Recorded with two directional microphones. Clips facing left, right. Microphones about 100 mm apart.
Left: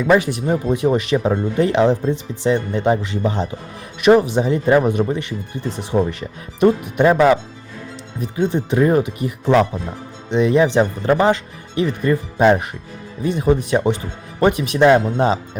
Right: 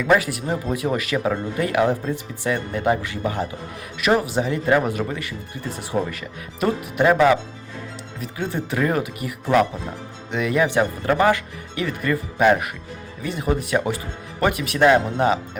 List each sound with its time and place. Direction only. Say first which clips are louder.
0.0 s speech: left 4 dB; 25° left (ahead or behind)